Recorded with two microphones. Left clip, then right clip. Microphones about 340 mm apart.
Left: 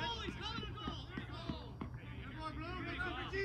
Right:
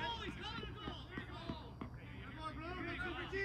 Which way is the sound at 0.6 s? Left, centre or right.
Centre.